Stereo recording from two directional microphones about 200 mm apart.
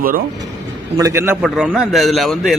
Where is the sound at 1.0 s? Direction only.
10° right (ahead or behind).